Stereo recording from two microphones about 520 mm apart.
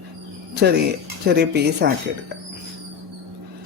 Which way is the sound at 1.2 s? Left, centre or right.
Centre.